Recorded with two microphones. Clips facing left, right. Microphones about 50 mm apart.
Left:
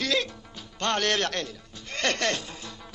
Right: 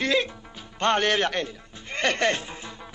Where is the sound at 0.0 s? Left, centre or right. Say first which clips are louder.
Right 3 dB; right.